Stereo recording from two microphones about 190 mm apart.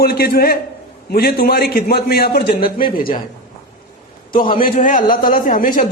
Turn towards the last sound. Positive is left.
turn(degrees=45)  # may be behind; listen again after turning